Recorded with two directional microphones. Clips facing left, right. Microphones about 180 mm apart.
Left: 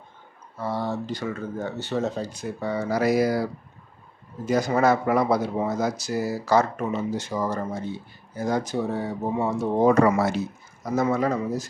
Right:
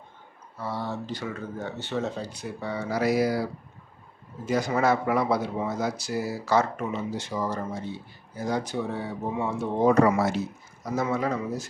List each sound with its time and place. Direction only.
0.6 s speech: 45° left (ahead or behind)
4.4 s speech: 40° left (ahead or behind)
10.9 s speech: 45° left (ahead or behind)